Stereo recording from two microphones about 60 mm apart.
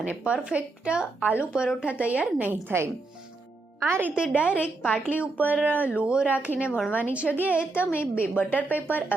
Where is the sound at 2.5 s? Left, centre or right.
Right.